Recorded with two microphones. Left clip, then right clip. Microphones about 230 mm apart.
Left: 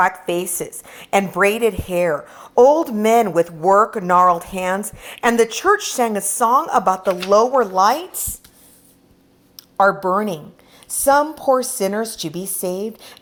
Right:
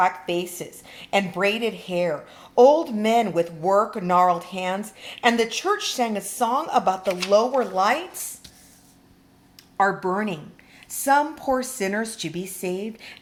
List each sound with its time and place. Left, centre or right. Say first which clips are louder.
0.0 s a woman's voice: left 4 dB; left
9.7 s a woman's voice: left 6 dB; left